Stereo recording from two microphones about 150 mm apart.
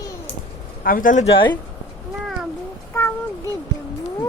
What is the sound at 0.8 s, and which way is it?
Speech, 65° left (ahead or behind).